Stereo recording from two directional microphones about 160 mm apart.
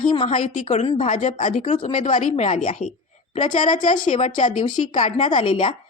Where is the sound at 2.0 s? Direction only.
50° left (ahead or behind).